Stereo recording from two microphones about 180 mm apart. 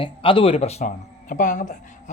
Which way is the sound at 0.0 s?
30° left (ahead or behind).